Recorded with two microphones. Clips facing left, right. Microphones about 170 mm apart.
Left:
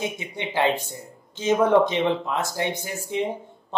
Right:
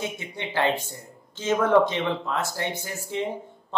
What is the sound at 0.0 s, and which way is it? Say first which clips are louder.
Speech: left 2 dB; 15° left (ahead or behind).